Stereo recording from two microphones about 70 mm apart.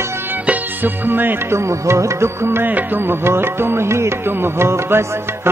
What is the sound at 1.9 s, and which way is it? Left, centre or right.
Music, right.